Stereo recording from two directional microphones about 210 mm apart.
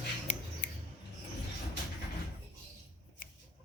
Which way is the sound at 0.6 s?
55° left (ahead or behind).